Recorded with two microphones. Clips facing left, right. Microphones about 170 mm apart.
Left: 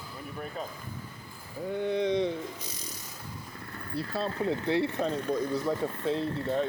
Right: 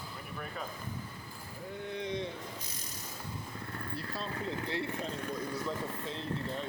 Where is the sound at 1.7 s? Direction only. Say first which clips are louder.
Left 10 dB; 80° left.